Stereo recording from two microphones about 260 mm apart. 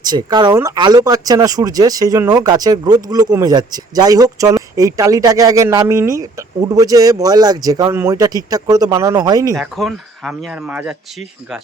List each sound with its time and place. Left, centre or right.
0.0 s speech: centre
9.6 s speech: centre